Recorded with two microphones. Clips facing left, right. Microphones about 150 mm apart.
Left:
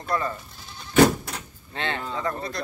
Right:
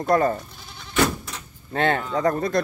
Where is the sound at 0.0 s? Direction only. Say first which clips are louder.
Right 8 dB; 45° right (ahead or behind).